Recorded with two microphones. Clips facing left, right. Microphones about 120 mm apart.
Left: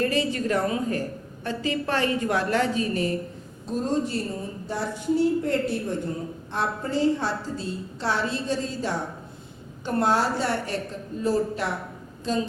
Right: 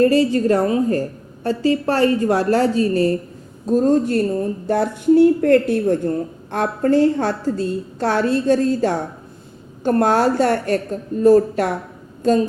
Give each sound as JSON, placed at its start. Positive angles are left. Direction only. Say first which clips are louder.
{"t": 0.0, "sound": "a woman's voice", "louder": "right 10 dB", "side_deg": -35}